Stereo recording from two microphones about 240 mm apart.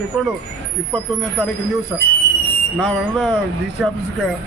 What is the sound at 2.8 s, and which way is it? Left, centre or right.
Speech, centre.